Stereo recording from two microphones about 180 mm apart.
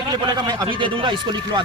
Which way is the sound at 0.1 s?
25° right (ahead or behind).